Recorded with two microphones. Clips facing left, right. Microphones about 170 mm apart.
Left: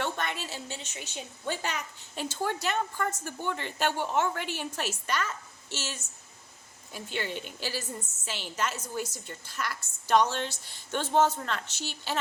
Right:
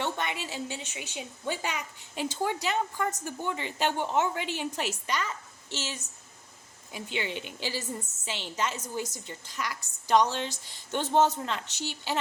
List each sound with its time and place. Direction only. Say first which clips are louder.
0.0 s a woman's voice: right 1 dB; 15° right (ahead or behind)